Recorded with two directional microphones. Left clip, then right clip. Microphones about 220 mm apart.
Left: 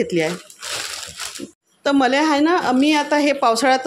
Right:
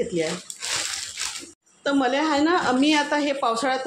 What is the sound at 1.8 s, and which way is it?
Speech, 35° left (ahead or behind).